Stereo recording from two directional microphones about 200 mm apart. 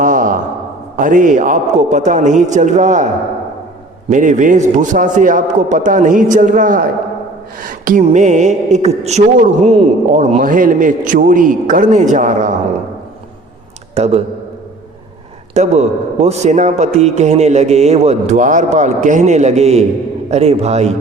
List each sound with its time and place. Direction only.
0.0 s a sound: 40° right (ahead or behind)
0.9 s a man's voice: 40° right (ahead or behind)
4.1 s a man's voice: 40° right (ahead or behind)
13.9 s a man's voice: 30° right (ahead or behind)
15.5 s a man's voice: 35° right (ahead or behind)